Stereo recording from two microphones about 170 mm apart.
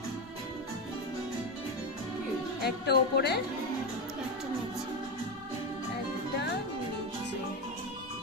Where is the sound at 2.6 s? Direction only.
70° left (ahead or behind).